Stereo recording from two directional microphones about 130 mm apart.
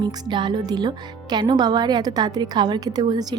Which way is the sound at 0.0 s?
35° right (ahead or behind).